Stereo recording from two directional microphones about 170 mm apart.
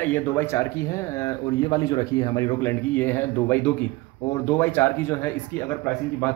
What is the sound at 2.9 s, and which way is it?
Speech, 10° left (ahead or behind).